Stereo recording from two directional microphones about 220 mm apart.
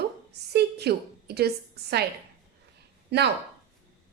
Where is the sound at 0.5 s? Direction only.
45° right (ahead or behind).